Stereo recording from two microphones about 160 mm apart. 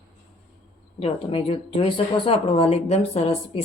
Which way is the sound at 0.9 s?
35° left (ahead or behind).